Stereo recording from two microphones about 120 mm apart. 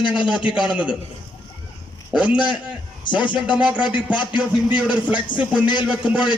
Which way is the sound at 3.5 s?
10° right (ahead or behind).